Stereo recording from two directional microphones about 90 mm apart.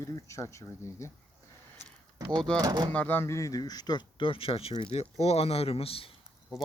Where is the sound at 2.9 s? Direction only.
20° left (ahead or behind).